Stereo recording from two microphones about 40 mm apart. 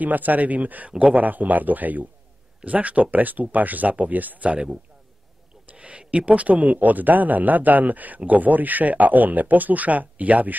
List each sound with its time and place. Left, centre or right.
0.0 s speech: right
5.7 s speech: right